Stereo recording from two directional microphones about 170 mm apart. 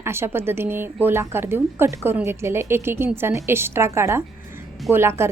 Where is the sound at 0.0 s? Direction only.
15° right (ahead or behind).